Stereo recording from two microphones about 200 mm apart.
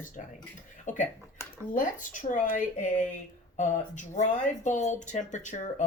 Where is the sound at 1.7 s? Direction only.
40° left (ahead or behind).